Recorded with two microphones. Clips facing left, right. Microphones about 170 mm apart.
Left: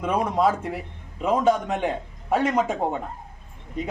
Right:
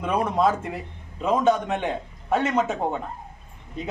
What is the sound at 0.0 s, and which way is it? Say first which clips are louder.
A man's voice: even; 10° left (ahead or behind).